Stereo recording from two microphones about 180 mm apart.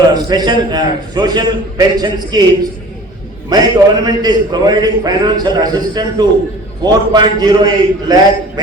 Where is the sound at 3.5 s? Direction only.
20° right (ahead or behind).